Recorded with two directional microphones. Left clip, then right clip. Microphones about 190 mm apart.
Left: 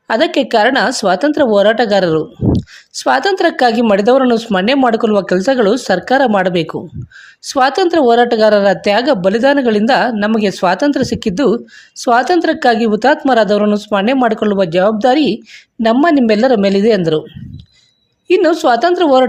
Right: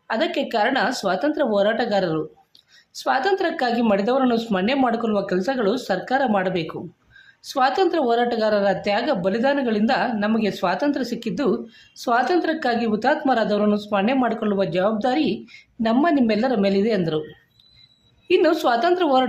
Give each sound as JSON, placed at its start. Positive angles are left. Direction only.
{"t": 0.1, "sound": "speech", "side_deg": 40}
{"t": 18.3, "sound": "speech", "side_deg": 35}